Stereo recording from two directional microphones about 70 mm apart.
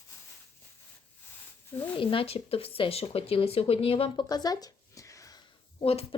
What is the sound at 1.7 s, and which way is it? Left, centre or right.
Speech, left.